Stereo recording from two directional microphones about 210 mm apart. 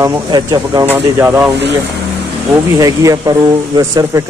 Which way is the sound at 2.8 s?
15° right (ahead or behind).